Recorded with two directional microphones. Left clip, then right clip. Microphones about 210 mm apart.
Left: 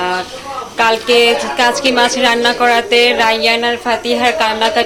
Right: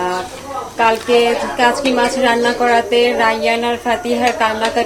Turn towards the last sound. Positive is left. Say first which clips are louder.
# left 3 dB
turn(degrees=5)  # may be behind; listen again after turning